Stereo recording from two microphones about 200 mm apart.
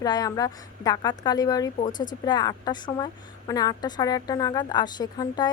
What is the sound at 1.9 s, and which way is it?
Speech, 40° left (ahead or behind).